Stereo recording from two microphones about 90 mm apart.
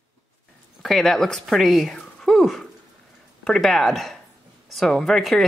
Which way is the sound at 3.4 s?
5° left (ahead or behind).